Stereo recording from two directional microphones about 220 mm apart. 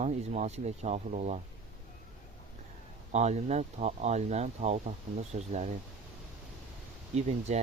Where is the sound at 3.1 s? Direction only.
30° right (ahead or behind).